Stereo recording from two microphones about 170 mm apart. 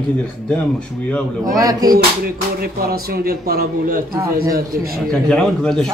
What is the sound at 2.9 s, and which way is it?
A man's voice, 60° right (ahead or behind).